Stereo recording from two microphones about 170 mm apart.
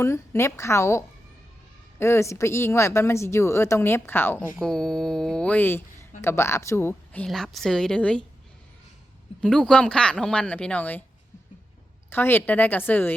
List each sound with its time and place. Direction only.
0.0 s speech: 15° left (ahead or behind)
4.5 s speech: centre (ahead or behind)
9.4 s speech: 5° left (ahead or behind)
12.1 s speech: 10° left (ahead or behind)